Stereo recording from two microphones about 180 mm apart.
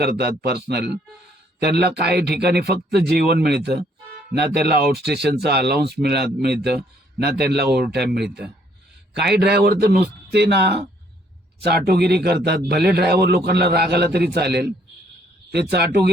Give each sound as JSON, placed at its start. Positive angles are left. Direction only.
{"t": 0.0, "sound": "speech", "side_deg": -60}